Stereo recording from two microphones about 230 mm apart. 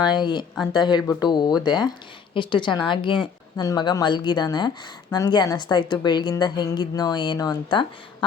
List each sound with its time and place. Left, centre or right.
0.0 s a woman's voice: centre